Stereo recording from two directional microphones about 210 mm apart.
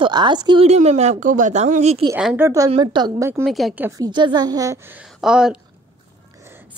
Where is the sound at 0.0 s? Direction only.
20° right (ahead or behind).